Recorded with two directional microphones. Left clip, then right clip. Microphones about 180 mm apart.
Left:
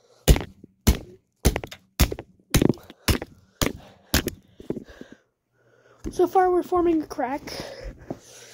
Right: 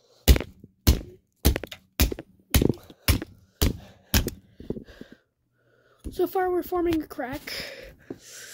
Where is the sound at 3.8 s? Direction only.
25° right (ahead or behind).